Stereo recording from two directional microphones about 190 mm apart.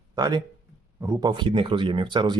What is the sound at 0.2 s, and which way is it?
Speech, 20° right (ahead or behind).